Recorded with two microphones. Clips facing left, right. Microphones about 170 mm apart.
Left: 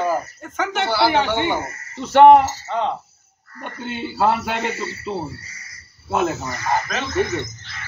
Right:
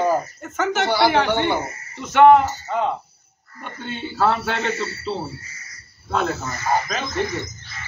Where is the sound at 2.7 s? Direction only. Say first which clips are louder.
Right 1 dB; 5° right (ahead or behind).